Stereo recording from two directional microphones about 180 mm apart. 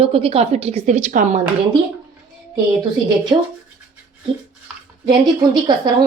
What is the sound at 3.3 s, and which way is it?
Speech, 20° right (ahead or behind).